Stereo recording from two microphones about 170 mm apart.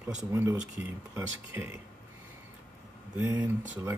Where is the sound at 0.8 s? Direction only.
10° right (ahead or behind).